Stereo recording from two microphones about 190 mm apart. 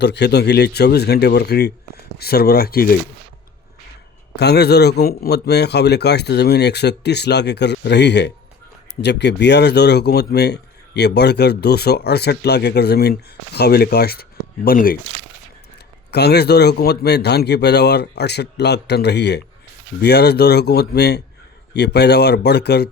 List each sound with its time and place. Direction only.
0.0 s speech: 60° left (ahead or behind)
4.4 s speech: 60° left (ahead or behind)
16.1 s speech: 60° left (ahead or behind)